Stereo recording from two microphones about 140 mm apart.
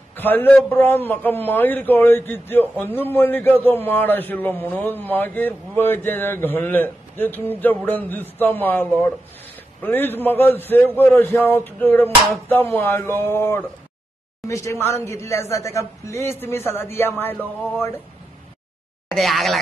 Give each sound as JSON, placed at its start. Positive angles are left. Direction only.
{"t": 0.1, "sound": "a man's voice", "side_deg": 15}
{"t": 19.0, "sound": "speech", "side_deg": 0}